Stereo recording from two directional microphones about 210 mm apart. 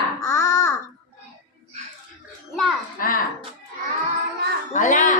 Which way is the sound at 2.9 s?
40° left (ahead or behind).